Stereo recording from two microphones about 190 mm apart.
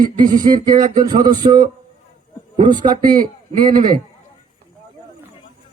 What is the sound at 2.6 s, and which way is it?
Speech, 25° right (ahead or behind).